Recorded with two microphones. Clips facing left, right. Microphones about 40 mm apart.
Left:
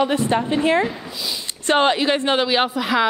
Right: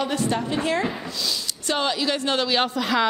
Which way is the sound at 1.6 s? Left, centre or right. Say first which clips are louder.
Left 7 dB; left.